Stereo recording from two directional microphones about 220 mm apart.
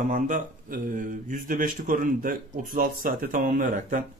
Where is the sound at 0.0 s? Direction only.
35° right (ahead or behind).